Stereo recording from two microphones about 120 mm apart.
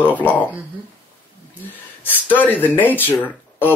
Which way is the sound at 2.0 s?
15° left (ahead or behind).